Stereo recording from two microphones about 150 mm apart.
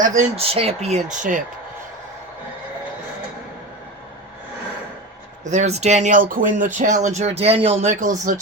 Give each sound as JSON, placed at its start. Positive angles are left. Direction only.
{"t": 0.0, "sound": "speech", "side_deg": -55}
{"t": 0.5, "sound": "speech", "side_deg": -40}
{"t": 5.5, "sound": "speech", "side_deg": -50}